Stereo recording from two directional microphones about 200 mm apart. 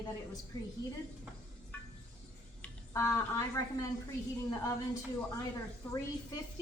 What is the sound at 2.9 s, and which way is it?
Speech, 15° left (ahead or behind).